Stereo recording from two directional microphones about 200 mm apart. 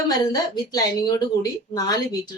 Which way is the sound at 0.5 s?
20° left (ahead or behind).